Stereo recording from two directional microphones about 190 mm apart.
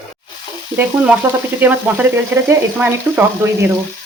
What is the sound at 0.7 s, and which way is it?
Speech, 10° right (ahead or behind).